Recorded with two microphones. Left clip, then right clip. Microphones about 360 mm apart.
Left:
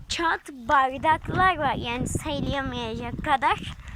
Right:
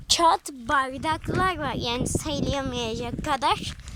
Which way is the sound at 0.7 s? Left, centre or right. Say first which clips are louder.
Left 4 dB; centre.